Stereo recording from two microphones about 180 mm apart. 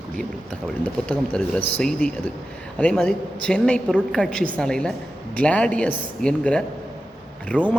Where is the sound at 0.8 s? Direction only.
10° left (ahead or behind).